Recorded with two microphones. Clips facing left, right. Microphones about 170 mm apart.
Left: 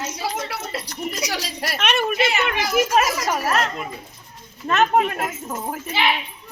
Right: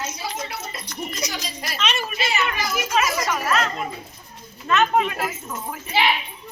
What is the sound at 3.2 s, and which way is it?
Speech, 40° left (ahead or behind).